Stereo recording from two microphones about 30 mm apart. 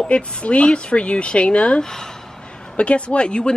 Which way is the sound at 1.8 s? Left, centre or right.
Left.